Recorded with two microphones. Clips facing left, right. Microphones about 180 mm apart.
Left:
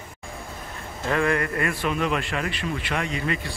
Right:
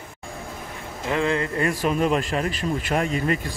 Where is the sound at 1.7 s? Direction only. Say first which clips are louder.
Right 4 dB; 40° right (ahead or behind).